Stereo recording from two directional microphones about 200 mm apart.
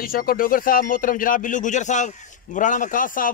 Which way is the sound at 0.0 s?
45° left (ahead or behind).